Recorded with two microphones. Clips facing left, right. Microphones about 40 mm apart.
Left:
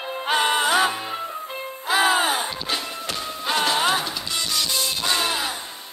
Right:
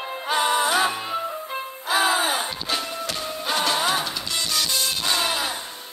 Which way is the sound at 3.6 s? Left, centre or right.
Left.